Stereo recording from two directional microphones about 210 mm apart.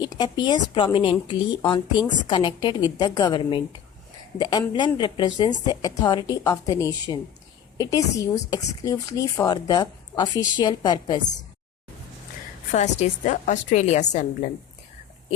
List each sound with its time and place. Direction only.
0.0 s speech: 20° left (ahead or behind)
12.7 s a woman's voice: 35° left (ahead or behind)